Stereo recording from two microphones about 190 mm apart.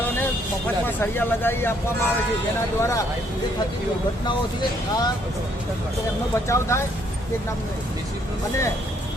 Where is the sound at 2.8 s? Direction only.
15° left (ahead or behind).